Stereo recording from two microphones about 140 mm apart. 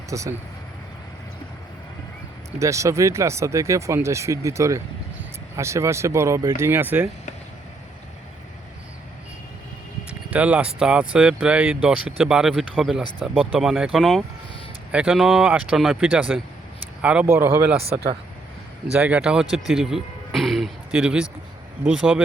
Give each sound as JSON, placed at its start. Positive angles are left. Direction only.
{"t": 0.1, "sound": "speech", "side_deg": -20}
{"t": 2.6, "sound": "speech", "side_deg": -20}
{"t": 10.2, "sound": "speech", "side_deg": -10}
{"t": 18.9, "sound": "speech", "side_deg": -10}